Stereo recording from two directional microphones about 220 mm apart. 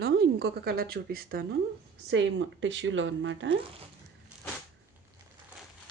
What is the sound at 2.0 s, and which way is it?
Speech, 55° right (ahead or behind).